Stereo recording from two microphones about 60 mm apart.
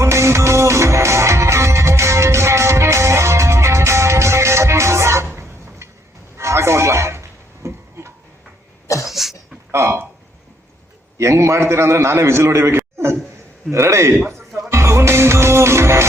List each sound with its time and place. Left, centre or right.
0.0 s music: right
6.3 s a sound: right
9.0 s cough: centre
9.7 s a sound: right
11.2 s a man's voice: right
14.3 s music: right